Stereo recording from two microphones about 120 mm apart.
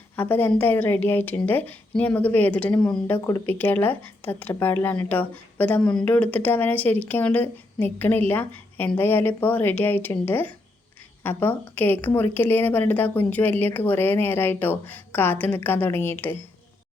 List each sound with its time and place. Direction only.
0.2 s speech: 15° left (ahead or behind)